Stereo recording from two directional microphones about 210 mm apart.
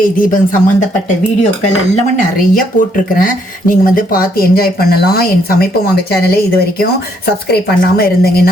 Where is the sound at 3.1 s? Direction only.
40° left (ahead or behind).